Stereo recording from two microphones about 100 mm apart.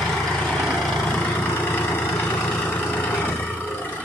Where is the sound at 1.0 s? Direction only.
20° left (ahead or behind).